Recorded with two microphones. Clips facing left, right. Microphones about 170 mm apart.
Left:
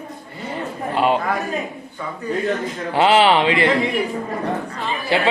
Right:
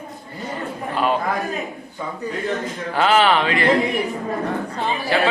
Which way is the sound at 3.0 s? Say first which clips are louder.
Left 2 dB; 25° left (ahead or behind).